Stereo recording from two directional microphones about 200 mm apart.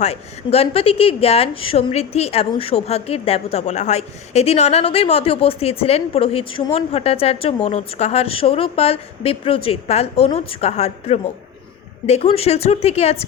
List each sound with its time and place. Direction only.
0.0 s speech: 30° left (ahead or behind)